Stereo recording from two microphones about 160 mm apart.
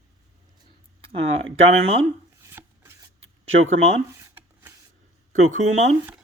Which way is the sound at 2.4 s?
15° right (ahead or behind).